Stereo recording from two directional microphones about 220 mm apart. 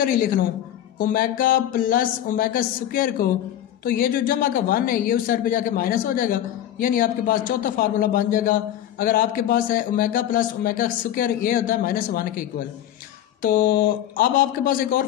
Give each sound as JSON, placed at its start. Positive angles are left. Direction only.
{"t": 0.0, "sound": "speech", "side_deg": 40}